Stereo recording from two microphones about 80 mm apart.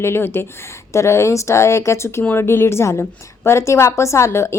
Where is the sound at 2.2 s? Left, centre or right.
Left.